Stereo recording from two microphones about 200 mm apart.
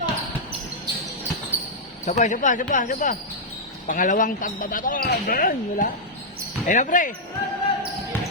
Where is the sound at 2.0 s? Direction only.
35° left (ahead or behind).